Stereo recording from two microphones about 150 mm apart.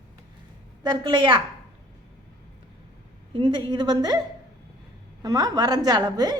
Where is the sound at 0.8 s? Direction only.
30° right (ahead or behind).